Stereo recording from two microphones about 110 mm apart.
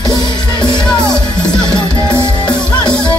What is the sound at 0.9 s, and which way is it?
Music, 40° left (ahead or behind).